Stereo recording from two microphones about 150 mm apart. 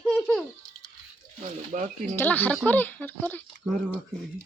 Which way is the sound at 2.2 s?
10° left (ahead or behind).